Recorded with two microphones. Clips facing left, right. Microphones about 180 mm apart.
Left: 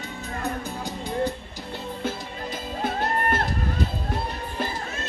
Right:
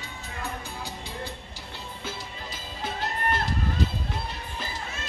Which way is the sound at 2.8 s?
50° left (ahead or behind).